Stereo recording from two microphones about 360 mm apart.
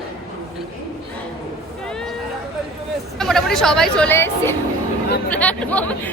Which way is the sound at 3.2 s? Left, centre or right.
Centre.